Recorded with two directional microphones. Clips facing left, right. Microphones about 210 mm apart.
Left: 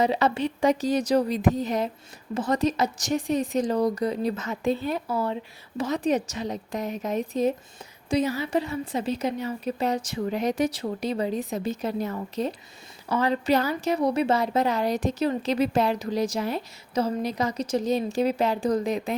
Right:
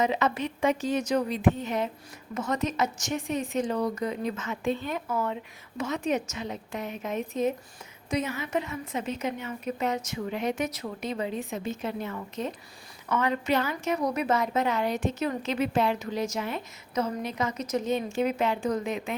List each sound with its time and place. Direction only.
0.0 s a woman's voice: 35° left (ahead or behind)